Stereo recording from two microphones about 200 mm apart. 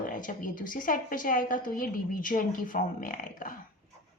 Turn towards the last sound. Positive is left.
turn(degrees=40)  # may be behind; listen again after turning